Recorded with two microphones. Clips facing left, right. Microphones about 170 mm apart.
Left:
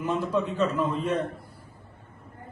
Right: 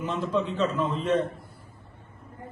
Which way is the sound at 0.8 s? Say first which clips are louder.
Right 1 dB; centre (ahead or behind).